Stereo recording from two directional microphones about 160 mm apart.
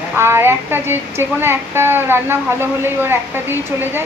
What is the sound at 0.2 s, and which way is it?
A woman's voice, 15° right (ahead or behind).